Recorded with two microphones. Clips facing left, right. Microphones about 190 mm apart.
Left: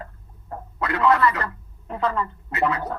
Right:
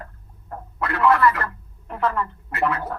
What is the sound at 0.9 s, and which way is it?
Speech, 20° left (ahead or behind).